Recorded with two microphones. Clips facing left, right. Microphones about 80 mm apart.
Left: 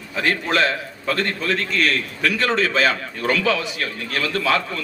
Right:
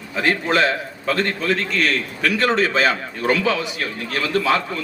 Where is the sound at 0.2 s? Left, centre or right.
Centre.